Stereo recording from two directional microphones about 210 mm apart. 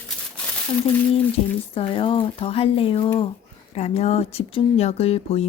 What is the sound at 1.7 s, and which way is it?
Speech, 25° left (ahead or behind).